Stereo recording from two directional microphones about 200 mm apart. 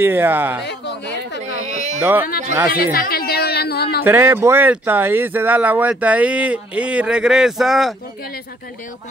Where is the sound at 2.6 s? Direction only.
50° left (ahead or behind).